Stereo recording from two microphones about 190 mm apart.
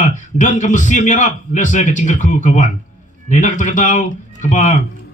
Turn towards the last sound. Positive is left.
turn(degrees=40)  # may be behind; listen again after turning